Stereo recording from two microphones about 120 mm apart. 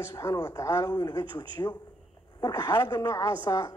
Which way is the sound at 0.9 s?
35° left (ahead or behind).